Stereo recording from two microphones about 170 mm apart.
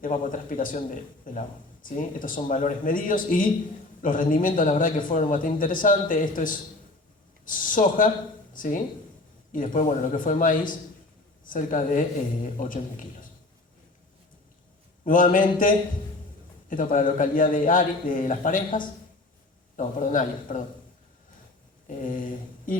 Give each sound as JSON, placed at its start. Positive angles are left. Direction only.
{"t": 0.0, "sound": "a man's voice", "side_deg": 50}
{"t": 15.0, "sound": "a man's voice", "side_deg": 50}
{"t": 21.8, "sound": "mantra", "side_deg": 50}